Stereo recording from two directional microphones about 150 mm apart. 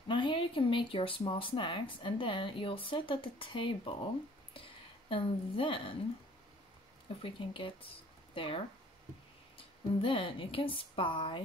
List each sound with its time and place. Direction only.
0.1 s speech: 35° left (ahead or behind)
5.1 s speech: 35° left (ahead or behind)
7.2 s speech: 35° left (ahead or behind)
10.0 s speech: 35° left (ahead or behind)